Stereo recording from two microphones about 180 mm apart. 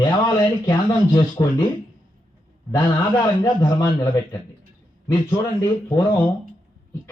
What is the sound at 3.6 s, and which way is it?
Speech, 20° left (ahead or behind).